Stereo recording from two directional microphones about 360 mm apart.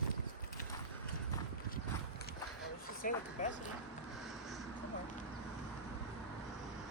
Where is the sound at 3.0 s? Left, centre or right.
Left.